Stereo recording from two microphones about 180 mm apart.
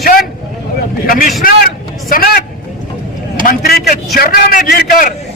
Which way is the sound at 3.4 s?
55° left (ahead or behind).